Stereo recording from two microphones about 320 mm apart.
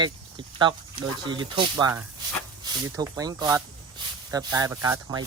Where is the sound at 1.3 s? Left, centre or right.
Centre.